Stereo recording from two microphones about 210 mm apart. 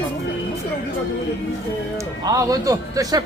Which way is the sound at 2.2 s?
15° right (ahead or behind).